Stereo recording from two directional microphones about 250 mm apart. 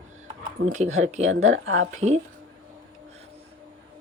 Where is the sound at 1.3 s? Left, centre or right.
Right.